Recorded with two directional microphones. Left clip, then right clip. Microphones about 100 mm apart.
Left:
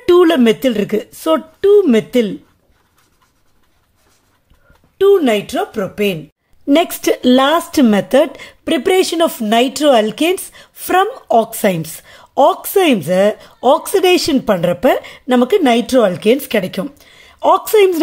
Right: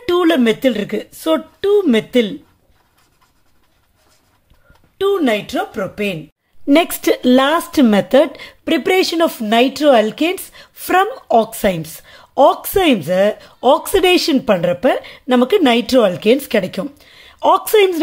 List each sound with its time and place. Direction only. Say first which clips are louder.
0.0 s speech: left 4 dB; 30° left (ahead or behind)
1.2 s a woman's voice: left 3 dB; 15° left (ahead or behind)
4.9 s a woman's voice: left 5 dB; 15° left (ahead or behind)
6.6 s a woman's voice: even; centre (ahead or behind); by 15.1 s 15° left (ahead or behind)
15.1 s a woman's voice: left 1 dB; 5° left (ahead or behind)
17.7 s speech: left 2 dB; 20° left (ahead or behind)